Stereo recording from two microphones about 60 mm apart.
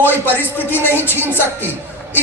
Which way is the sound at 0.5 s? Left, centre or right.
Left.